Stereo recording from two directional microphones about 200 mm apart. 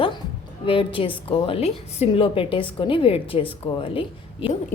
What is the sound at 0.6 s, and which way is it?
A woman's voice, 25° left (ahead or behind).